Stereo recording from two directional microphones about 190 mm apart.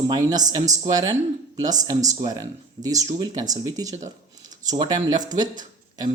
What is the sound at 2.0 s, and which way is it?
Speech, 40° right (ahead or behind).